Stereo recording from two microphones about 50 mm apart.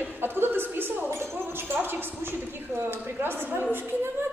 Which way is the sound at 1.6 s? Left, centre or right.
Right.